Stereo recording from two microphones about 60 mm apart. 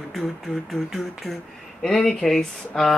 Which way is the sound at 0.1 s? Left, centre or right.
Centre.